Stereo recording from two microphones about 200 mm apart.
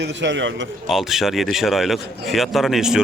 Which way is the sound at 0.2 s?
65° right (ahead or behind).